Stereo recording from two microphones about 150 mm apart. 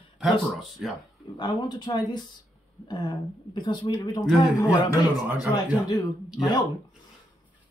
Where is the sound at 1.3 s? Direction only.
30° left (ahead or behind).